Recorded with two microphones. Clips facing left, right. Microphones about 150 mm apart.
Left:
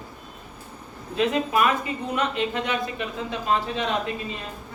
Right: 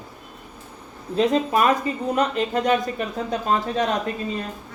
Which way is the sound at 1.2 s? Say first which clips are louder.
Right 3 dB; 40° right (ahead or behind).